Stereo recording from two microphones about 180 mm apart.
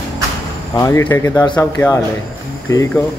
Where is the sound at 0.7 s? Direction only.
15° left (ahead or behind).